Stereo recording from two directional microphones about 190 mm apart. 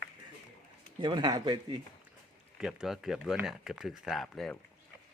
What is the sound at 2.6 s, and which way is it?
Speech, 5° right (ahead or behind).